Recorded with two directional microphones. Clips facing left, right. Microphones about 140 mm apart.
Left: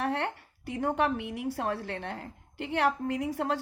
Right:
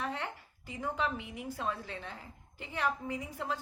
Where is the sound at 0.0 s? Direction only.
65° left (ahead or behind).